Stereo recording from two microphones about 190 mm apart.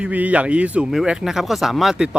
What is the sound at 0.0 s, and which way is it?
Speech, 10° right (ahead or behind).